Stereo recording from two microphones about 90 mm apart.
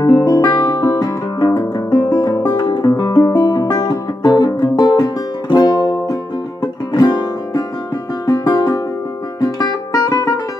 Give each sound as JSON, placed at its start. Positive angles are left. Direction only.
{"t": 0.1, "sound": "guitar", "side_deg": 45}
{"t": 1.9, "sound": "music", "side_deg": 55}
{"t": 2.1, "sound": "music", "side_deg": 40}
{"t": 2.5, "sound": "guitar", "side_deg": 55}
{"t": 3.3, "sound": "music", "side_deg": 45}